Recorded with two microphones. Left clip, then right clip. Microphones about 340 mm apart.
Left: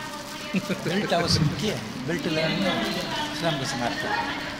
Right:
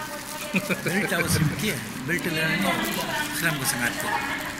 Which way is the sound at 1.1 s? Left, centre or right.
Left.